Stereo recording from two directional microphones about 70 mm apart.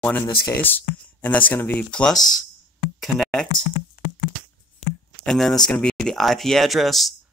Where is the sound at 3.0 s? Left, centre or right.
Centre.